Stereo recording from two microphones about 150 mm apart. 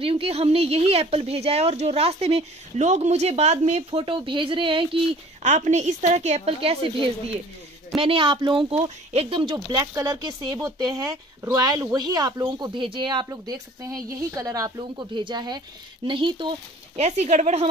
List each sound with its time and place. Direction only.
0.0 s speech: 40° right (ahead or behind)
5.4 s speech: 50° right (ahead or behind); by 16.4 s 35° right (ahead or behind)
16.9 s speech: 45° right (ahead or behind)